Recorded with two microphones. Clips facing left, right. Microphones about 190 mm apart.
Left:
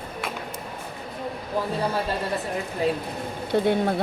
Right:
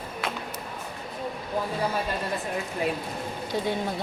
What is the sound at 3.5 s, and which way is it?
Speech, 60° left (ahead or behind).